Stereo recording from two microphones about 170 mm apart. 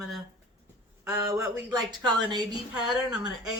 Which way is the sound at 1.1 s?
20° right (ahead or behind).